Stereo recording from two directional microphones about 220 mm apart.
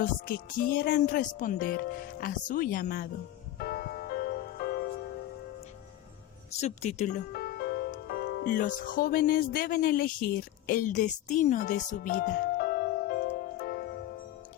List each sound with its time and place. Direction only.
0.0 s speech: 40° left (ahead or behind)
3.6 s music: 45° left (ahead or behind)
6.5 s speech: 30° left (ahead or behind)
7.3 s music: 45° left (ahead or behind)